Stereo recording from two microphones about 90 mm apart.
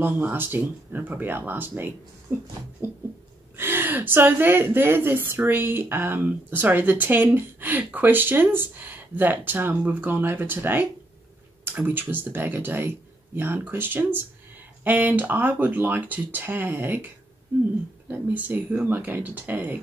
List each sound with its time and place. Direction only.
0.0 s speech: 25° right (ahead or behind)
18.1 s speech: 25° right (ahead or behind)